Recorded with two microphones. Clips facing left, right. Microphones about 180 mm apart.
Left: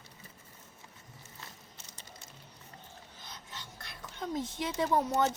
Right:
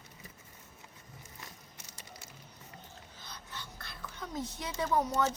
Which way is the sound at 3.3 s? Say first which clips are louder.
Right 1 dB; 25° left (ahead or behind).